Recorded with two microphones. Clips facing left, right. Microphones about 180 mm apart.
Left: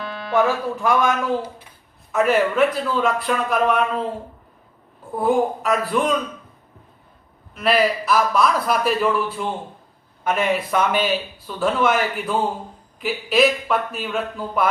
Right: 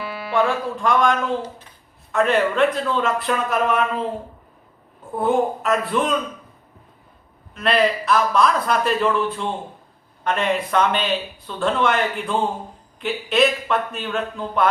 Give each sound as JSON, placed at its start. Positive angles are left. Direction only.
{"t": 0.0, "sound": "music", "side_deg": -10}
{"t": 0.3, "sound": "a man's voice", "side_deg": 5}
{"t": 5.1, "sound": "a man's voice", "side_deg": 0}
{"t": 7.5, "sound": "a man's voice", "side_deg": 0}